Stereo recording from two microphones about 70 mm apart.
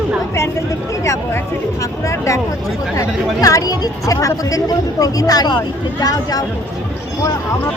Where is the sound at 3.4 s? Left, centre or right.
Left.